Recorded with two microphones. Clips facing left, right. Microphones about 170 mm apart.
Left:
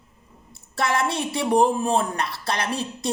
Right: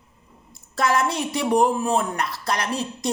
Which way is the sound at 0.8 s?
30° left (ahead or behind).